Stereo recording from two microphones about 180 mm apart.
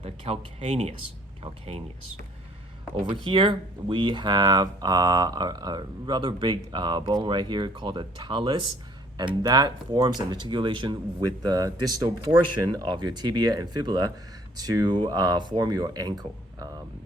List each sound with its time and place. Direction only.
0.0 s speech: 35° right (ahead or behind)
3.2 s speech: 25° right (ahead or behind)